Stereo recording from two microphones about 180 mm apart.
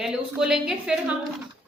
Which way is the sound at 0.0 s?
5° right (ahead or behind).